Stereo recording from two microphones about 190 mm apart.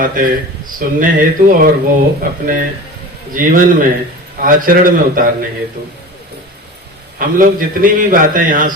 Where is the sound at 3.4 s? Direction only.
45° right (ahead or behind).